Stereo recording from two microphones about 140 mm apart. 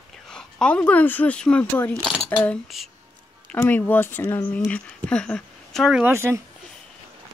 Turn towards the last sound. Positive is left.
turn(degrees=-20)  # may be behind; listen again after turning